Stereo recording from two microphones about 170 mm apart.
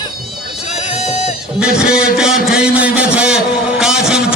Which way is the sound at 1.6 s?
5° right (ahead or behind).